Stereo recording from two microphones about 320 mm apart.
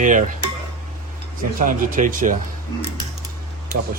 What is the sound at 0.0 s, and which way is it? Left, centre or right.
Speech, right.